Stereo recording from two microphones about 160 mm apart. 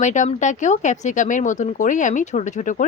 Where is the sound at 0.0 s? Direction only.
50° left (ahead or behind).